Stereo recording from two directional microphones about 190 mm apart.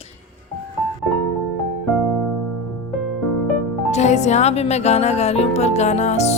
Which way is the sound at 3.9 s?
40° left (ahead or behind).